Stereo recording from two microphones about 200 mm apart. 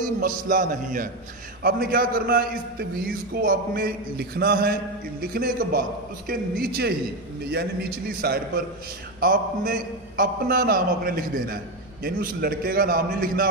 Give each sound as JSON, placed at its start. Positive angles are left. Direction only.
{"t": 0.0, "sound": "a man's voice", "side_deg": -45}